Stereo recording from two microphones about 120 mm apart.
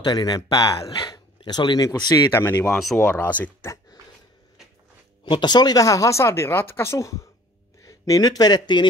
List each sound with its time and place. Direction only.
0.0 s speech: 35° left (ahead or behind)
2.3 s speech: 20° left (ahead or behind)
2.7 s speech: centre (ahead or behind)
3.1 s speech: 15° left (ahead or behind)
5.2 s speech: 40° left (ahead or behind)